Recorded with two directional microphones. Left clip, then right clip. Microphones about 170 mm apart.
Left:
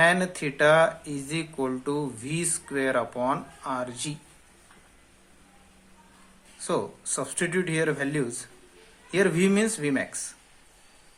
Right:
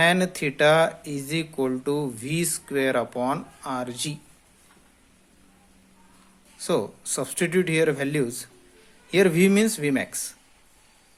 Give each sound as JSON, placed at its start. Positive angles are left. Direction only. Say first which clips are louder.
{"t": 0.0, "sound": "speech", "louder": "right 1 dB", "side_deg": -45}
{"t": 6.6, "sound": "speech", "louder": "right 3 dB", "side_deg": -40}